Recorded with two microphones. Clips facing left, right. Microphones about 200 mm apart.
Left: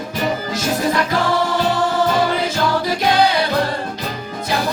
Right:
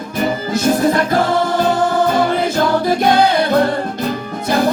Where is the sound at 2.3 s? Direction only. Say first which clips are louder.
Right 4 dB; 50° right (ahead or behind).